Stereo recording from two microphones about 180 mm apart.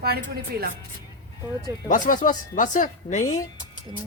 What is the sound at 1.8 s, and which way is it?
Speech, 45° left (ahead or behind).